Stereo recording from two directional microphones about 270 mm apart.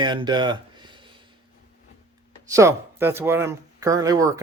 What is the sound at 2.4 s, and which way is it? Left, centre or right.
Speech, centre.